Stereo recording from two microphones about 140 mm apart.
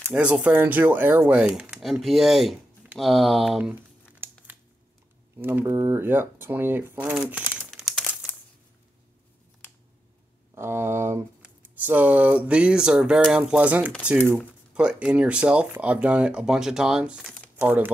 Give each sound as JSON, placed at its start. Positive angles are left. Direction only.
{"t": 0.0, "sound": "speech", "side_deg": -10}
{"t": 4.1, "sound": "crumpling", "side_deg": -10}
{"t": 5.4, "sound": "speech", "side_deg": -15}
{"t": 10.5, "sound": "a sound", "side_deg": -15}
{"t": 11.4, "sound": "speech", "side_deg": -10}